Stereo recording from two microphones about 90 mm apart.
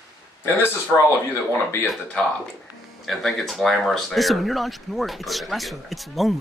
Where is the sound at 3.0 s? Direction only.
Centre (ahead or behind).